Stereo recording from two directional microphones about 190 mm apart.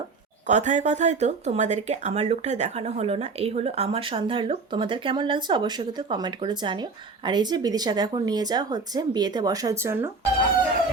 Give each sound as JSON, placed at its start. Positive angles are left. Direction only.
{"t": 0.4, "sound": "a woman's voice", "side_deg": -40}